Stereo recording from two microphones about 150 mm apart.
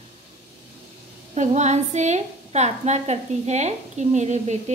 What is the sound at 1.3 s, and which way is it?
A woman's voice, 50° right (ahead or behind).